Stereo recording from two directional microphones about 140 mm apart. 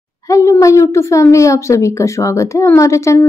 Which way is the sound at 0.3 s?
20° left (ahead or behind).